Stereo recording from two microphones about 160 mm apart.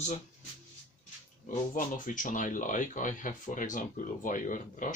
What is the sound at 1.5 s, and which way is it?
Speech, 55° left (ahead or behind).